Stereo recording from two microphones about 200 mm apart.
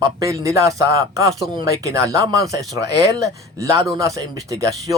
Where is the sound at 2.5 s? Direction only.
15° right (ahead or behind).